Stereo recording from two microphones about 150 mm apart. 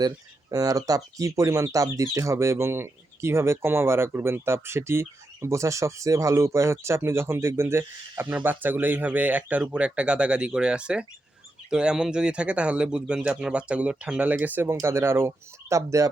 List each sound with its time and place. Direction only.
0.5 s speech: 25° right (ahead or behind)